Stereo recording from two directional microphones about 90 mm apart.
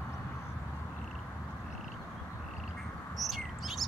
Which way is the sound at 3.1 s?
Centre (ahead or behind).